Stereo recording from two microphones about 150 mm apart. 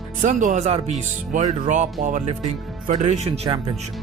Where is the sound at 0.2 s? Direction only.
55° right (ahead or behind).